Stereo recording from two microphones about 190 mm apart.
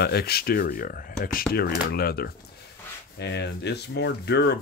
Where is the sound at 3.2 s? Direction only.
65° left (ahead or behind).